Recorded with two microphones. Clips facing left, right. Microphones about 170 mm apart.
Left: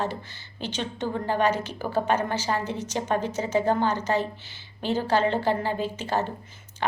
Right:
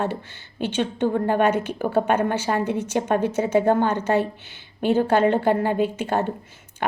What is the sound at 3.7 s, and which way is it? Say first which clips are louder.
A woman's voice: right 4 dB; 55° right (ahead or behind).